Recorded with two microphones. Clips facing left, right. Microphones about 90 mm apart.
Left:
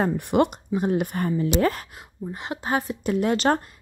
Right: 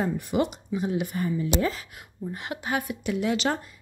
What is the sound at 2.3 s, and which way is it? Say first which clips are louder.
Speech: left 4 dB; 25° left (ahead or behind).